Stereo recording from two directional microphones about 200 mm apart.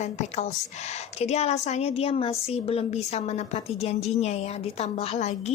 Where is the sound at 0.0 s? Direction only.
35° left (ahead or behind).